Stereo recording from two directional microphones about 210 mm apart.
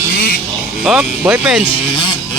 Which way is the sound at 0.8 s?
5° right (ahead or behind).